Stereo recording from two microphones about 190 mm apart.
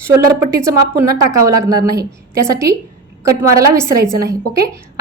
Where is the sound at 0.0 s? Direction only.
15° right (ahead or behind).